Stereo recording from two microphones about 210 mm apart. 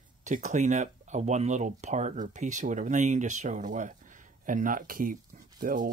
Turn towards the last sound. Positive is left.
turn(degrees=-40)  # may be behind; listen again after turning